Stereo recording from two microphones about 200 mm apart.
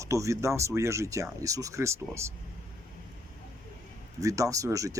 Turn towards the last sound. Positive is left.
turn(degrees=-15)  # may be behind; listen again after turning